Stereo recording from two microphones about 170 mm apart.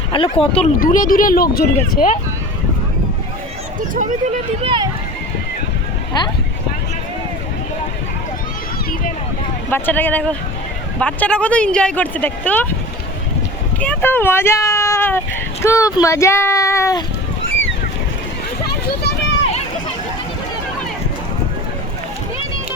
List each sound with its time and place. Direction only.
0.1 s speech: 35° left (ahead or behind)
0.8 s speech: 50° left (ahead or behind)
3.8 s speech: 50° right (ahead or behind)
9.6 s speech: 10° left (ahead or behind)
13.7 s speech: 10° left (ahead or behind)
19.0 s a sound: 90° left